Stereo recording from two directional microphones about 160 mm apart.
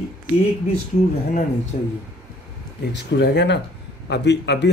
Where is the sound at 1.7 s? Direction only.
55° left (ahead or behind).